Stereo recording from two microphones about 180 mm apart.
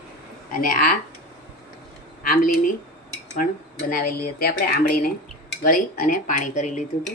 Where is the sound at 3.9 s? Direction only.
55° left (ahead or behind).